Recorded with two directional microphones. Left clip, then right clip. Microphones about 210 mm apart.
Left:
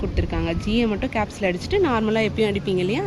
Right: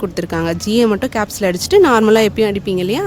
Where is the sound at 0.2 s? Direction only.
55° right (ahead or behind).